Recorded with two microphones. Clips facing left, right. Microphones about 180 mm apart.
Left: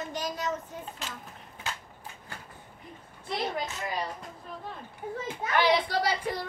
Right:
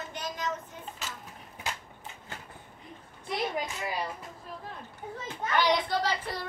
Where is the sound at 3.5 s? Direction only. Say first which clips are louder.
Even; 10° right (ahead or behind).